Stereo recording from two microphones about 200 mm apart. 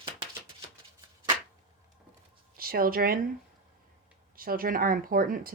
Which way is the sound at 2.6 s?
50° right (ahead or behind).